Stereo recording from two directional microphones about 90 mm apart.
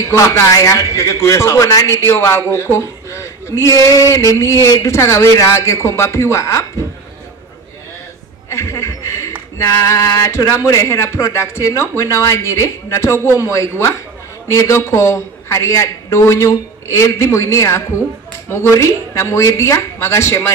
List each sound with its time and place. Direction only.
0.1 s a man's voice: 35° left (ahead or behind)
8.5 s a sound: 30° left (ahead or behind)
9.6 s a man's voice: 30° left (ahead or behind)